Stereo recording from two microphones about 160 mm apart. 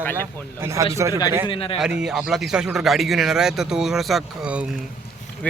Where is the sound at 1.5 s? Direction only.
35° left (ahead or behind).